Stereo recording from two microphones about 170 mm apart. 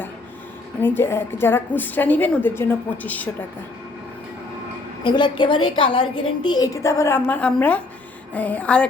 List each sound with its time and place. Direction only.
0.8 s a woman's voice: 10° left (ahead or behind)
5.0 s a woman's voice: 25° left (ahead or behind); by 8.9 s 5° left (ahead or behind)